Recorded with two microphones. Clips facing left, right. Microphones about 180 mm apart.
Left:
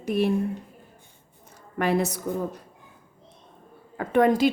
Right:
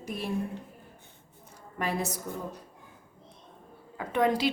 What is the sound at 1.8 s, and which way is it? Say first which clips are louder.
Speech: left 8 dB; 70° left (ahead or behind).